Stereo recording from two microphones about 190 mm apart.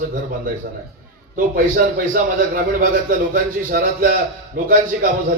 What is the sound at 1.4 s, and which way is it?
A man's voice, 45° right (ahead or behind).